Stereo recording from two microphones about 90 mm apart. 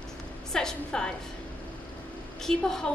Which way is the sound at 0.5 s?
10° left (ahead or behind).